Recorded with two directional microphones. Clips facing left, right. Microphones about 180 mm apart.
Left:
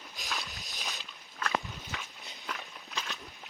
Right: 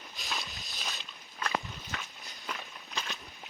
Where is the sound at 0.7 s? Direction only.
15° left (ahead or behind).